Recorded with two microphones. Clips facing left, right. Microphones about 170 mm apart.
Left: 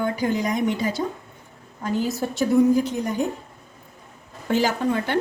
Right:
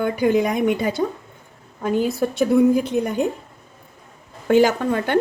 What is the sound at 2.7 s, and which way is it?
Speech, 60° right (ahead or behind).